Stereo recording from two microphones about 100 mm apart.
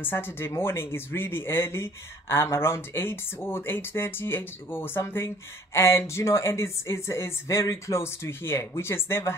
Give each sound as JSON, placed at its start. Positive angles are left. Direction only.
{"t": 0.0, "sound": "speech", "side_deg": 20}